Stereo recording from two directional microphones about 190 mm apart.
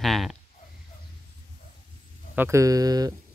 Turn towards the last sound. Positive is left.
turn(degrees=-20)  # may be behind; listen again after turning